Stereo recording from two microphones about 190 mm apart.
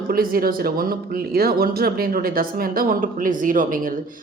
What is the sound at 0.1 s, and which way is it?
Speech, 50° right (ahead or behind).